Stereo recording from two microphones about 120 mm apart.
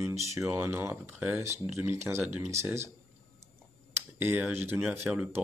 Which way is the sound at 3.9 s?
15° right (ahead or behind).